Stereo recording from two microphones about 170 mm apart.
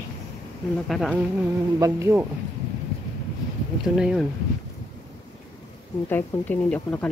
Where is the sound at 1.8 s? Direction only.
15° right (ahead or behind).